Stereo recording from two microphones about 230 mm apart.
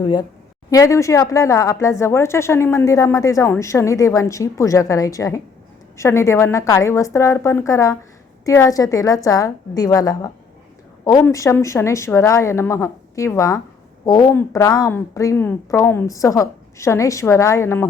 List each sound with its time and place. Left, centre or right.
0.0 s speech: centre